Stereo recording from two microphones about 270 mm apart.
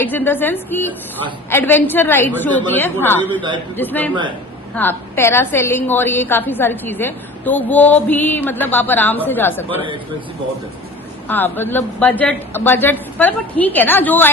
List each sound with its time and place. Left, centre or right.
0.0 s a woman's voice: centre
9.6 s speech: centre
11.3 s a woman's voice: centre